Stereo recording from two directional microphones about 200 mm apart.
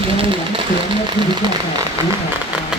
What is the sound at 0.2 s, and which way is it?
Sewing machine, 25° right (ahead or behind).